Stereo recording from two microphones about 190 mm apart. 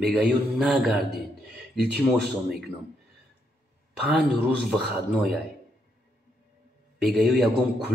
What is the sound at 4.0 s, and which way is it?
Speech, centre (ahead or behind).